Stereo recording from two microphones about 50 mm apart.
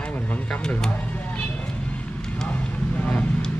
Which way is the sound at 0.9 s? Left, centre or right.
Left.